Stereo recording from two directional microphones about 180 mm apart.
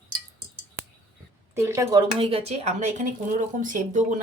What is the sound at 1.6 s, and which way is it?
A woman's voice, 15° right (ahead or behind).